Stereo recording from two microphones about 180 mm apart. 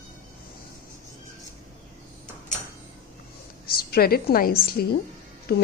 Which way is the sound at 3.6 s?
55° left (ahead or behind).